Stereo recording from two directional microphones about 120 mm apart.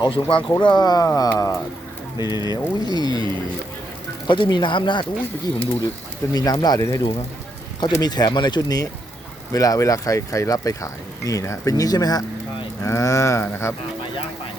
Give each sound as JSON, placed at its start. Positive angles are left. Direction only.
{"t": 0.0, "sound": "speech", "side_deg": 45}
{"t": 4.3, "sound": "speech", "side_deg": 40}
{"t": 6.3, "sound": "speech", "side_deg": 35}